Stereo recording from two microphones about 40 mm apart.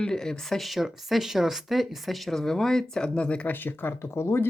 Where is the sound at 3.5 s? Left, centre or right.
Left.